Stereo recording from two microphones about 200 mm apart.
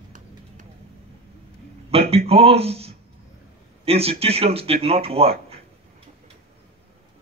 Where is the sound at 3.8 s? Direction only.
30° right (ahead or behind).